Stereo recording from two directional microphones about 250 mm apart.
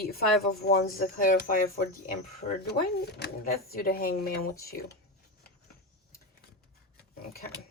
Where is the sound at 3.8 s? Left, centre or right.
Left.